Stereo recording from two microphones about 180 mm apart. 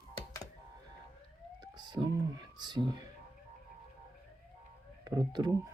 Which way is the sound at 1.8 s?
25° right (ahead or behind).